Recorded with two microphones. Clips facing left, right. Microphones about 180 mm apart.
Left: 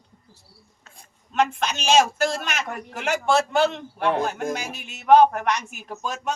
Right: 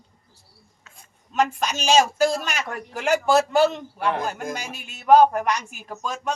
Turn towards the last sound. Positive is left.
turn(degrees=0)  # may be behind; listen again after turning